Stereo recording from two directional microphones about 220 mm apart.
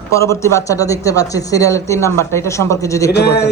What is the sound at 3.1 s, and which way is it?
Speech, 50° left (ahead or behind).